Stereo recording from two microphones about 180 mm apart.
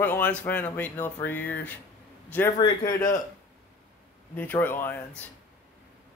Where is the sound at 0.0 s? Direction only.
10° left (ahead or behind).